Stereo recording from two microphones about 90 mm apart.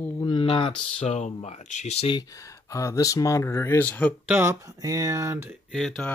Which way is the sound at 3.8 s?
15° left (ahead or behind).